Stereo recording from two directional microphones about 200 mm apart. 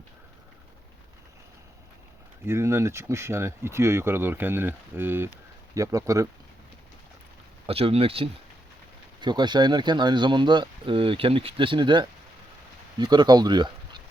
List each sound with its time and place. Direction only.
2.4 s speech: 15° right (ahead or behind)
7.7 s speech: 30° right (ahead or behind)